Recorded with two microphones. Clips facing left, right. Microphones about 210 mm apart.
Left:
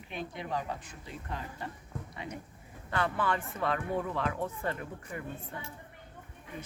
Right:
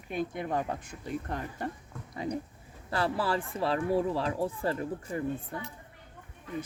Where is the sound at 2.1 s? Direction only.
40° right (ahead or behind).